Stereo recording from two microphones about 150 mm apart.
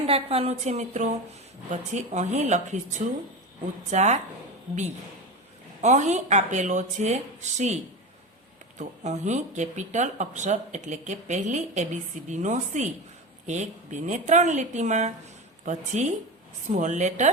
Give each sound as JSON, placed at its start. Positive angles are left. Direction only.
{"t": 0.1, "sound": "speech", "side_deg": -40}
{"t": 5.8, "sound": "speech", "side_deg": -50}
{"t": 8.8, "sound": "speech", "side_deg": -50}